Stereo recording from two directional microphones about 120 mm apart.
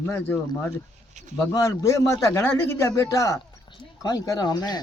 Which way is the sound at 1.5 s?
25° left (ahead or behind).